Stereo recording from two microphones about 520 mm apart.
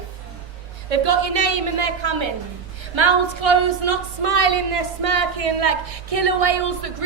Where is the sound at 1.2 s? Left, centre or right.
Right.